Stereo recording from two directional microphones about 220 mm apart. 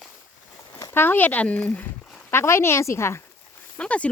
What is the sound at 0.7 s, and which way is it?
Speech, 15° left (ahead or behind).